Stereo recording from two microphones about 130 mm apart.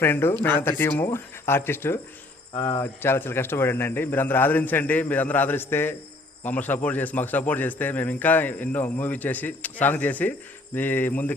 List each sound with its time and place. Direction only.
0.0 s a man's voice: 20° left (ahead or behind)
2.5 s a man's voice: 30° left (ahead or behind)